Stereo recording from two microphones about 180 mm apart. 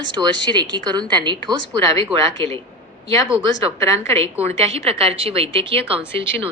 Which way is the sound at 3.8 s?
15° left (ahead or behind).